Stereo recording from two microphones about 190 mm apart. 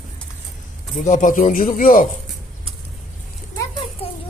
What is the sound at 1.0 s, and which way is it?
Speech, 40° left (ahead or behind).